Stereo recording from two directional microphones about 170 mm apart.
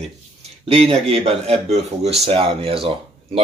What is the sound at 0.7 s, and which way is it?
Speech, 35° right (ahead or behind).